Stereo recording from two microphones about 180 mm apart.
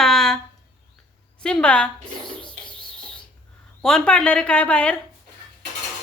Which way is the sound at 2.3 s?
5° left (ahead or behind).